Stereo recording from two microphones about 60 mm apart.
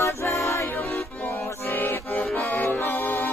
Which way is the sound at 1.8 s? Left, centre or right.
Left.